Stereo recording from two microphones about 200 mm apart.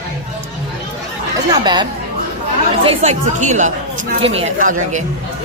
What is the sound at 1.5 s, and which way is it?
A woman's voice, 20° right (ahead or behind).